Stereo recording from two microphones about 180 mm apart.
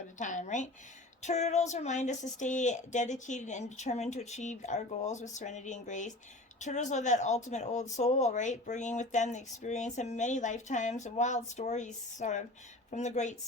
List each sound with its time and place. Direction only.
0.2 s speech: 45° left (ahead or behind)